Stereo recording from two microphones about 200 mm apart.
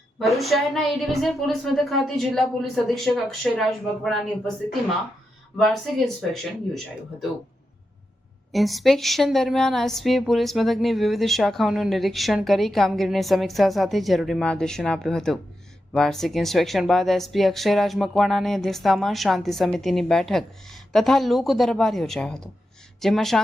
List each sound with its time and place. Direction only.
0.2 s a woman's voice: centre (ahead or behind)
8.5 s a woman's voice: centre (ahead or behind)